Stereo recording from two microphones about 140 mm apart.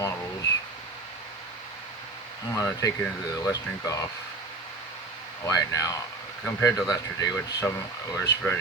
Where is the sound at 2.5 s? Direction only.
25° left (ahead or behind).